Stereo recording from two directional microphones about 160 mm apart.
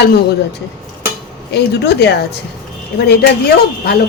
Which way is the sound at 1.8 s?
90° left.